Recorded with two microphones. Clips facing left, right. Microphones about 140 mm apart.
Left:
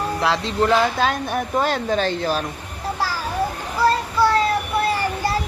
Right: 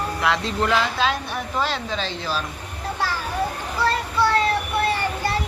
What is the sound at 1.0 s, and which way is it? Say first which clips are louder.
A woman's voice: left 3 dB; 50° left (ahead or behind).